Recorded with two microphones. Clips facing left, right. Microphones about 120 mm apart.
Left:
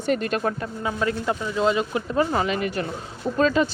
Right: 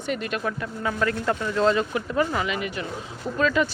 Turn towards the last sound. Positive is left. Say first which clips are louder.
# left 2 dB
turn(degrees=30)  # may be behind; listen again after turning